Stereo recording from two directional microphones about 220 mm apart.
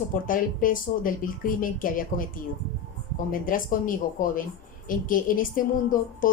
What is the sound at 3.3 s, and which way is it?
A woman's voice, 40° left (ahead or behind).